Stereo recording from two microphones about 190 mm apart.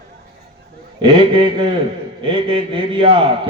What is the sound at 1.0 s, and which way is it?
A man's voice, 25° right (ahead or behind).